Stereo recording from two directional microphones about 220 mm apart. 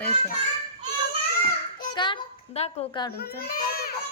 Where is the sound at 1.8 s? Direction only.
20° left (ahead or behind).